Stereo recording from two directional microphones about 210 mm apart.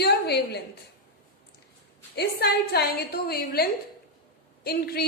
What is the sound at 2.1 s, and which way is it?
A woman's voice, 50° left (ahead or behind).